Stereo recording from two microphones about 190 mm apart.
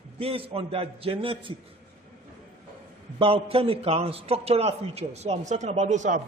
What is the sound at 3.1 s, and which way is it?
A man's voice, 30° right (ahead or behind).